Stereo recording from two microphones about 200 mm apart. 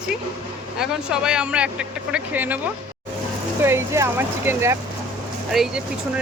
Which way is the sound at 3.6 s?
10° right (ahead or behind).